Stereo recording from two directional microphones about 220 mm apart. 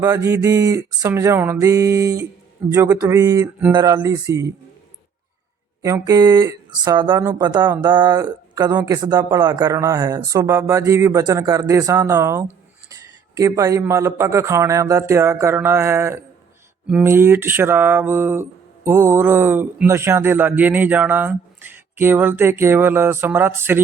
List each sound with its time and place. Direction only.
0.0 s speech: 15° right (ahead or behind)
5.8 s speech: 15° right (ahead or behind)